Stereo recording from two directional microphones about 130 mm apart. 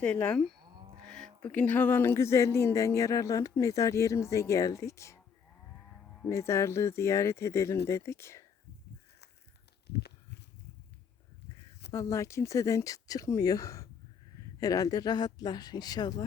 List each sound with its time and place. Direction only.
0.0 s livestock: 10° left (ahead or behind)
0.6 s cattle: 35° right (ahead or behind)
1.0 s speech: 5° left (ahead or behind); by 5.2 s 25° left (ahead or behind)
6.2 s speech: 20° left (ahead or behind)
11.9 s speech: 25° left (ahead or behind)